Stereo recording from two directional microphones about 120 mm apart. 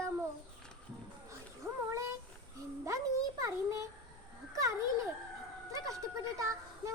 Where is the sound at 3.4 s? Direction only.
25° right (ahead or behind).